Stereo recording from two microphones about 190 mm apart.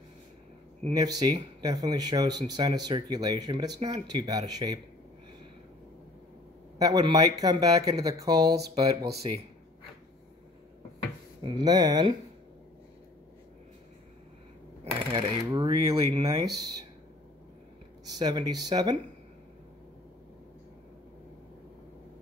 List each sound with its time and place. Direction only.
0.8 s speech: 20° right (ahead or behind)
6.8 s speech: 20° right (ahead or behind)
11.4 s speech: 20° right (ahead or behind)
15.1 s speech: 20° right (ahead or behind)
18.1 s speech: 20° right (ahead or behind)